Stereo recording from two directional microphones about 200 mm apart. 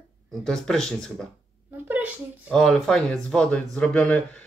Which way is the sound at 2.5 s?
Centre (ahead or behind).